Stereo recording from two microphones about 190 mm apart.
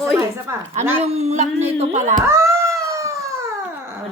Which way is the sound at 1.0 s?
35° right (ahead or behind).